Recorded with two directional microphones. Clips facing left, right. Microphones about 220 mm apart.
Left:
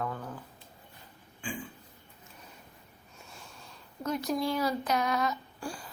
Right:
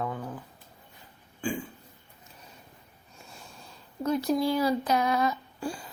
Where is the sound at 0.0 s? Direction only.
15° right (ahead or behind).